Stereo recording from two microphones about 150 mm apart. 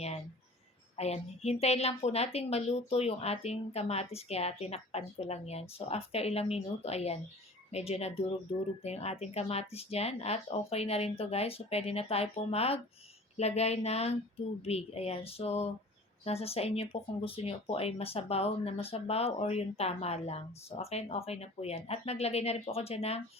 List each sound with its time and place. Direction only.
0.9 s speech: 45° left (ahead or behind)